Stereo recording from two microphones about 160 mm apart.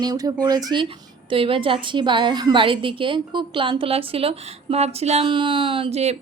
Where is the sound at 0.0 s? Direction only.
25° right (ahead or behind).